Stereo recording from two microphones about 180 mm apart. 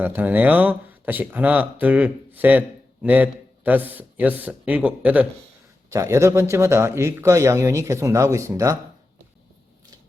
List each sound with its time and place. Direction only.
0.0 s speech: 10° right (ahead or behind)